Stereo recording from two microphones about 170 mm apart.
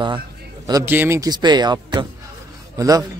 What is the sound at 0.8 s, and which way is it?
A man's voice, 10° right (ahead or behind).